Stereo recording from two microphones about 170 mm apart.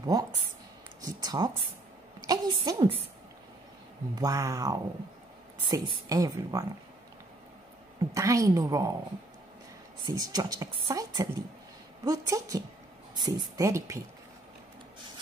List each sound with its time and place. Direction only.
0.0 s a woman's voice: 25° right (ahead or behind)
4.1 s speech: 20° right (ahead or behind)
8.0 s speech: 20° right (ahead or behind)
10.0 s speech: 25° right (ahead or behind)